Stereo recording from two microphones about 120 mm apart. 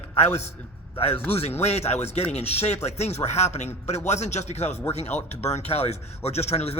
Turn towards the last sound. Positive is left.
turn(degrees=60)  # may be behind; listen again after turning